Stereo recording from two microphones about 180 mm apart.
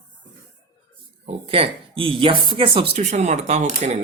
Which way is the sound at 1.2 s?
30° right (ahead or behind).